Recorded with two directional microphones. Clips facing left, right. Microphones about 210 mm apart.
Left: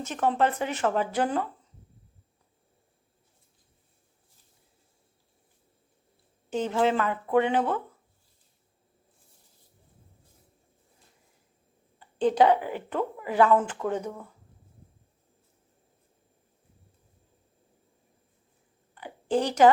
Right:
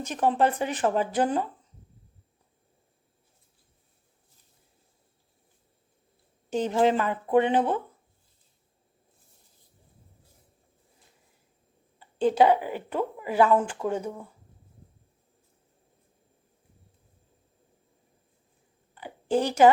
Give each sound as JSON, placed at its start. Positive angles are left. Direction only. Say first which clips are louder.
{"t": 0.0, "sound": "a woman's voice", "louder": "right 1 dB", "side_deg": -15}
{"t": 6.5, "sound": "speech", "louder": "right 2 dB", "side_deg": -15}
{"t": 11.9, "sound": "a woman's voice", "louder": "right 1 dB", "side_deg": -10}
{"t": 19.0, "sound": "a sound", "louder": "right 1 dB", "side_deg": -10}